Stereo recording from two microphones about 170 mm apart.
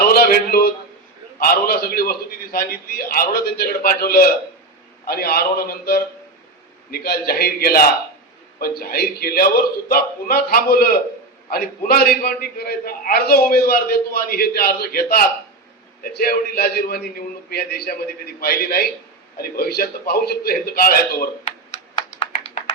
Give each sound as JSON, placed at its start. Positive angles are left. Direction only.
{"t": 0.1, "sound": "a sound", "side_deg": 65}
{"t": 1.4, "sound": "a man's voice", "side_deg": 65}
{"t": 21.7, "sound": "computer keyboard", "side_deg": 40}